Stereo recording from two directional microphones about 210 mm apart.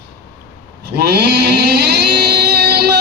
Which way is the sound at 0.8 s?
50° right (ahead or behind).